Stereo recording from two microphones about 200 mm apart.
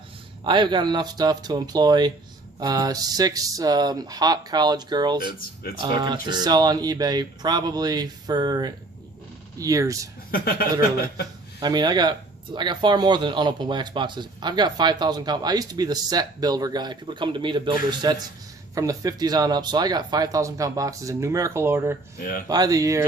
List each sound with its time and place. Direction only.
0.4 s speech: 25° right (ahead or behind)
10.3 s speech: 45° left (ahead or behind)
11.6 s speech: 20° right (ahead or behind)
22.2 s speech: 45° left (ahead or behind)
22.4 s speech: 20° right (ahead or behind)